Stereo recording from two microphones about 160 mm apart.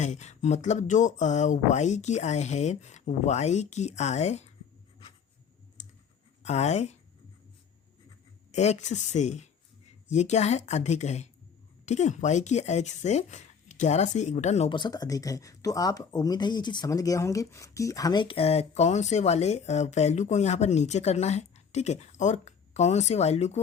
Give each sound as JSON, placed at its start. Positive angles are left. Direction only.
{"t": 0.0, "sound": "speech", "side_deg": 45}
{"t": 5.8, "sound": "clicking", "side_deg": 50}
{"t": 6.4, "sound": "speech", "side_deg": 45}
{"t": 8.5, "sound": "speech", "side_deg": 45}
{"t": 14.7, "sound": "speech", "side_deg": 25}